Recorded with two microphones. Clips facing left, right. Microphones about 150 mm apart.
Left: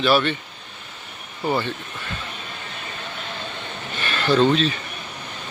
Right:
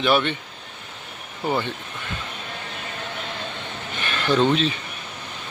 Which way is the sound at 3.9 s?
20° right (ahead or behind).